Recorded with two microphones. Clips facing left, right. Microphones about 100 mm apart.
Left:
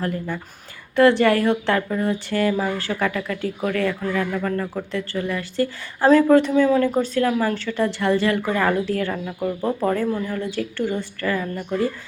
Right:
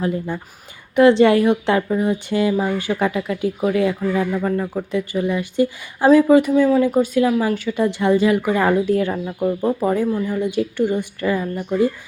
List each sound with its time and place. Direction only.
0.0 s speech: 20° right (ahead or behind)